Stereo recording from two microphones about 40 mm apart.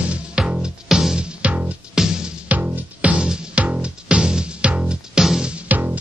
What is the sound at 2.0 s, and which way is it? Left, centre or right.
Music, centre.